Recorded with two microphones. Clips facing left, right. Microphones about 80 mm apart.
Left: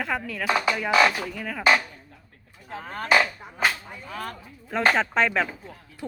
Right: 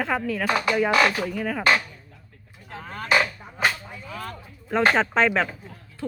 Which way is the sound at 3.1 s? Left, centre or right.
Centre.